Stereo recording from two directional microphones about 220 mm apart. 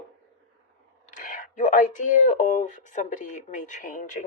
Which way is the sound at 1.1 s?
35° left (ahead or behind).